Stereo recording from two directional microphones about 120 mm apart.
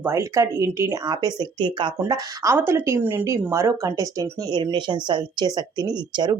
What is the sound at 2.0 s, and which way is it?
Speech, 25° right (ahead or behind).